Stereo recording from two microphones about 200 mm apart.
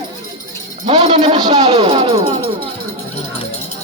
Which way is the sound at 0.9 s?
30° right (ahead or behind).